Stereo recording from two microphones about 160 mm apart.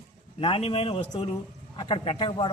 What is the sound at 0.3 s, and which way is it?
Speech, 35° left (ahead or behind).